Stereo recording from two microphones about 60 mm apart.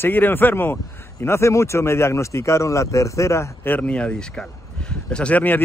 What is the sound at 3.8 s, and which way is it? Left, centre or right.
Speech, centre.